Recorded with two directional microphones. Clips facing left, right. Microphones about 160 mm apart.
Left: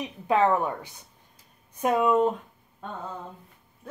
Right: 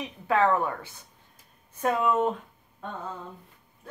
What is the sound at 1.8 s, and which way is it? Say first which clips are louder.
Speech: left 2 dB; 15° left (ahead or behind).